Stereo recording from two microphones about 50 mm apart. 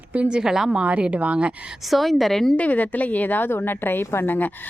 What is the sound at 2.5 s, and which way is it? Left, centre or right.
A woman's voice, left.